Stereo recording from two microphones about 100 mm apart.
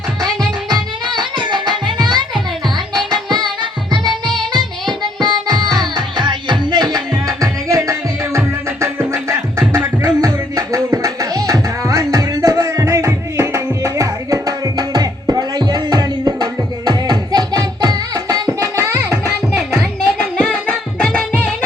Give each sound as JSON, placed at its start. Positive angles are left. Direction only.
{"t": 0.7, "sound": "music", "side_deg": -50}
{"t": 20.4, "sound": "music", "side_deg": 10}